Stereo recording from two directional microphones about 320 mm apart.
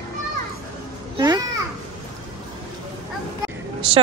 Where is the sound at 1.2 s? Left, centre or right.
Centre.